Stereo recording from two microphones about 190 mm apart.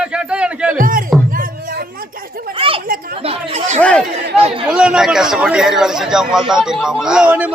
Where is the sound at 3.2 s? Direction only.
30° right (ahead or behind).